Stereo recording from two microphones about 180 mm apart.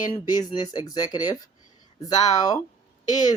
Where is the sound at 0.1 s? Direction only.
25° left (ahead or behind).